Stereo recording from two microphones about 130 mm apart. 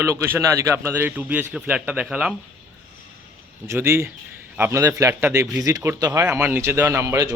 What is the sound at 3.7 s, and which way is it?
A man's voice, 20° right (ahead or behind).